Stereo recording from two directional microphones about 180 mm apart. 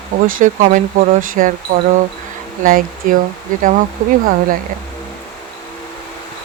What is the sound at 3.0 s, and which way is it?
Speech, 45° right (ahead or behind).